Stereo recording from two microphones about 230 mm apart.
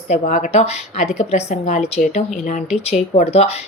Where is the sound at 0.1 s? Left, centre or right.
Left.